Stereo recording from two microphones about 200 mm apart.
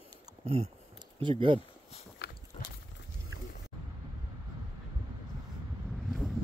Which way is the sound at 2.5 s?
35° left (ahead or behind).